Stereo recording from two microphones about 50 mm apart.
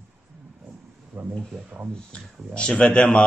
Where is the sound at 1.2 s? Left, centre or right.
Right.